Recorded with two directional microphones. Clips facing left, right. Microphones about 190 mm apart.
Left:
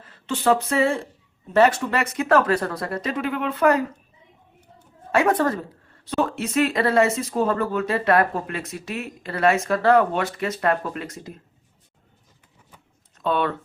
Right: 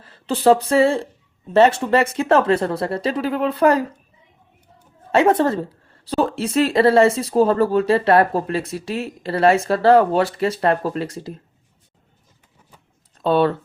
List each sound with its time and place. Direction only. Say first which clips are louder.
0.0 s speech: right 6 dB; 35° right (ahead or behind)
5.1 s speech: right 4 dB; 25° right (ahead or behind)
13.1 s speech: right 6 dB; 30° right (ahead or behind)